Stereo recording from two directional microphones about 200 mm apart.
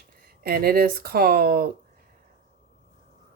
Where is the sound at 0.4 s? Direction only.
50° right (ahead or behind).